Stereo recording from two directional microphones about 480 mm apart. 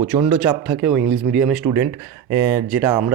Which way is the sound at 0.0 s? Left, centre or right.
Centre.